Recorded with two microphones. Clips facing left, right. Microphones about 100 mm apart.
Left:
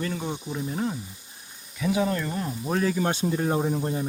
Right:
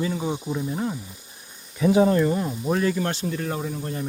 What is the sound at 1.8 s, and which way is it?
Speech, 35° right (ahead or behind).